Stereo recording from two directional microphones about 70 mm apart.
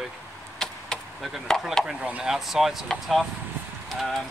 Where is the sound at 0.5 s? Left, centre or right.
Centre.